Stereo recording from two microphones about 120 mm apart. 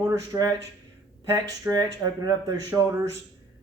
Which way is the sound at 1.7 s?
35° right (ahead or behind).